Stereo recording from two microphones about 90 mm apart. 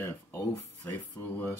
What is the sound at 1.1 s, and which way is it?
Speech, 20° left (ahead or behind).